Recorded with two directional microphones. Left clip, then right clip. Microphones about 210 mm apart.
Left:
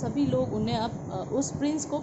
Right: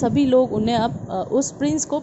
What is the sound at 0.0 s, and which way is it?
A woman's voice, 35° right (ahead or behind).